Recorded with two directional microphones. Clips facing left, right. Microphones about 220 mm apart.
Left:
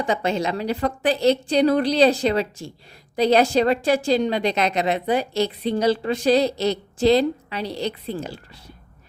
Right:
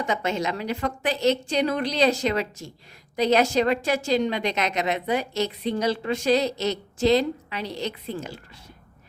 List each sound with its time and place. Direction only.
0.0 s a woman's voice: 30° left (ahead or behind)